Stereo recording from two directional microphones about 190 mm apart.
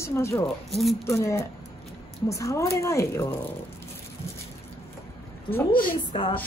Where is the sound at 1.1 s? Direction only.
15° left (ahead or behind).